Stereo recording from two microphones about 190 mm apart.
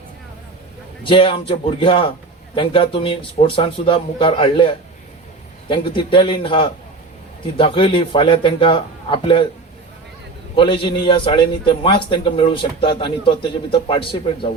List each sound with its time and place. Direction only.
1.0 s a man's voice: 25° left (ahead or behind)
10.5 s a man's voice: 25° left (ahead or behind)